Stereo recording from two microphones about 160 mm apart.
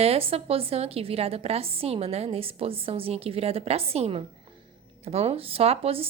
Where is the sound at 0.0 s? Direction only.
40° right (ahead or behind).